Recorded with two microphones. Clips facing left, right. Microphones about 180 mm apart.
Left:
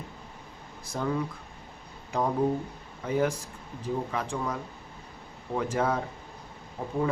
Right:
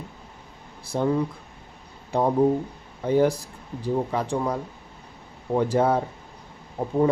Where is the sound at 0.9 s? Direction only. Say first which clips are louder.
Right 7 dB; 30° right (ahead or behind).